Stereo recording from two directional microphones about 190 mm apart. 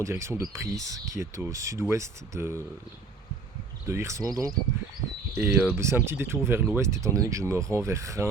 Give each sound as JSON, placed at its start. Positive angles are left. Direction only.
{"t": 0.0, "sound": "speech", "side_deg": -15}
{"t": 3.8, "sound": "speech", "side_deg": -15}